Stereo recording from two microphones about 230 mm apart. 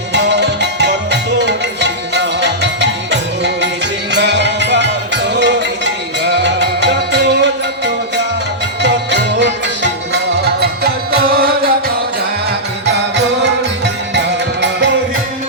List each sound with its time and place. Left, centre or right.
0.1 s music: right
8.8 s music: right
12.8 s music: right